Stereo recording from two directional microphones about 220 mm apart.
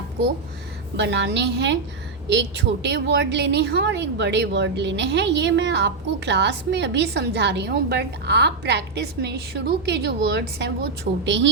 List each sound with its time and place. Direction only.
0.9 s a woman's voice: 55° right (ahead or behind)